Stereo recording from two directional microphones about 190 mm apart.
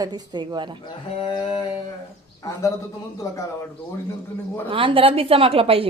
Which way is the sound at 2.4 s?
15° left (ahead or behind).